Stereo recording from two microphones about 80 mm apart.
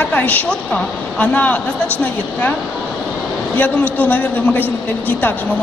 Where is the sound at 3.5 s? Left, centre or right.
Centre.